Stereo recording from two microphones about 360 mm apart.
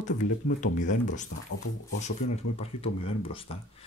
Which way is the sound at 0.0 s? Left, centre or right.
Left.